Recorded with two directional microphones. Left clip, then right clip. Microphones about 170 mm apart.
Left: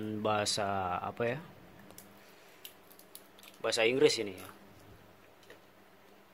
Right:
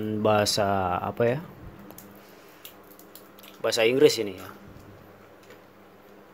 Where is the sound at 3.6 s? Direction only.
15° right (ahead or behind).